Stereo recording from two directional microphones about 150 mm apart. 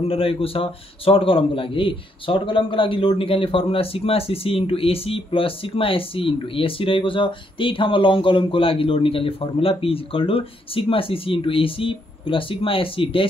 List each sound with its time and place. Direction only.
0.0 s a man's voice: 40° left (ahead or behind)